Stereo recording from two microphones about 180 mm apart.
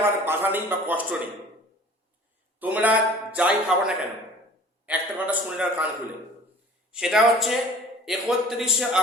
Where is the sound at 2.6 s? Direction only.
10° right (ahead or behind).